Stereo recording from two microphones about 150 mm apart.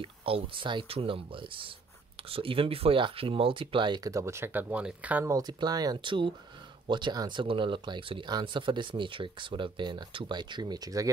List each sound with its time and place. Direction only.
0.0 s speech: 35° right (ahead or behind); by 5.3 s 10° right (ahead or behind)
5.3 s speech: 25° right (ahead or behind)